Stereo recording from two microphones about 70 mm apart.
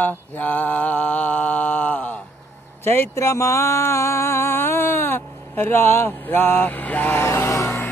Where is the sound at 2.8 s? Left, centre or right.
Left.